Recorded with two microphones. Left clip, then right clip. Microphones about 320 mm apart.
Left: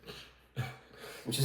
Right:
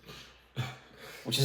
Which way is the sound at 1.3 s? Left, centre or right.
Right.